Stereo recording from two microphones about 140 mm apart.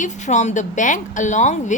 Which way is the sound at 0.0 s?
55° left (ahead or behind).